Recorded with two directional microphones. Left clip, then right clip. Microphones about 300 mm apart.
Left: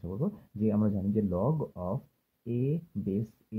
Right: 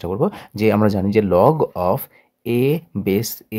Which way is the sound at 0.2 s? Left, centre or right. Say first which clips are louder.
Right 14 dB; right.